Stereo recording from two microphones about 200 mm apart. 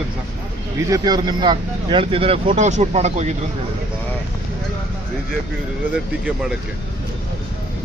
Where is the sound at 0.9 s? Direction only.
20° right (ahead or behind); by 3.3 s 35° right (ahead or behind).